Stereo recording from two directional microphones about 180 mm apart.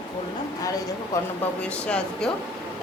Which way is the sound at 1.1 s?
15° left (ahead or behind).